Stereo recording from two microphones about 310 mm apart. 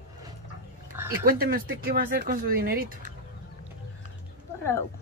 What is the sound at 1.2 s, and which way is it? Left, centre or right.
Speech, right.